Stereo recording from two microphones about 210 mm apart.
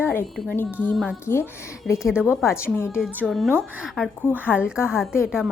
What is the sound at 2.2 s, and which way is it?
Speech, 10° left (ahead or behind).